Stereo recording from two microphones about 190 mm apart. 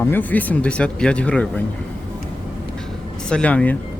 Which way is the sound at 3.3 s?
5° left (ahead or behind).